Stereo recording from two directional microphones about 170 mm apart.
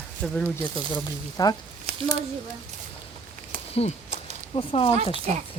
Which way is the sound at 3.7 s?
40° left (ahead or behind).